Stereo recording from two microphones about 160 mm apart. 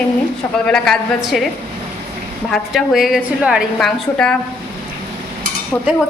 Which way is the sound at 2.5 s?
Centre (ahead or behind).